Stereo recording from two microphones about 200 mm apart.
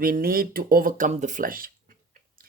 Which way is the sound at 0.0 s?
45° right (ahead or behind).